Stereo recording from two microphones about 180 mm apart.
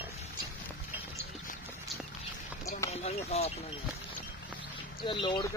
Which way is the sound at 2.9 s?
35° left (ahead or behind).